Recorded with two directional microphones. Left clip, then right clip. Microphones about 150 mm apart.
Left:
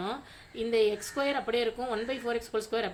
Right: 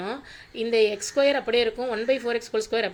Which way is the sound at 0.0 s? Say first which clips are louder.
Right 3 dB; 20° right (ahead or behind).